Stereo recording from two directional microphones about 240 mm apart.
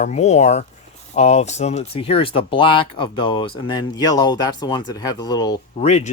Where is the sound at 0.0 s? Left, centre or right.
Left.